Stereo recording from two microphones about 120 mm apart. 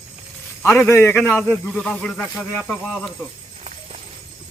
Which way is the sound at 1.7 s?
5° left (ahead or behind).